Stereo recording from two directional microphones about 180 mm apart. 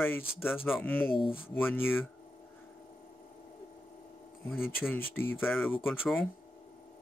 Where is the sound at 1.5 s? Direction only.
10° left (ahead or behind).